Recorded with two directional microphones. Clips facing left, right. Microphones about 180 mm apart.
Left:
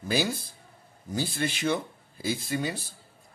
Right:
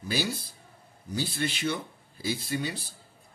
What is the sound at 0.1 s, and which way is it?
Speech, 50° left (ahead or behind).